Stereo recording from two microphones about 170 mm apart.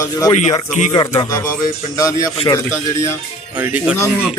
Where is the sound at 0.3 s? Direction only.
40° left (ahead or behind).